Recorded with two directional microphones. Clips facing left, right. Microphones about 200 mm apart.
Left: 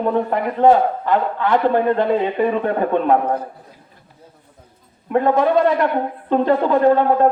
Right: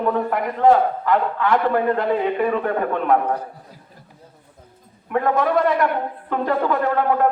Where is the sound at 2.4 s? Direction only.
30° left (ahead or behind).